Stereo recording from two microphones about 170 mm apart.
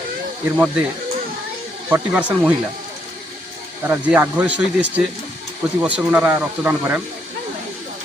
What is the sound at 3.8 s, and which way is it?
Speech, 10° right (ahead or behind).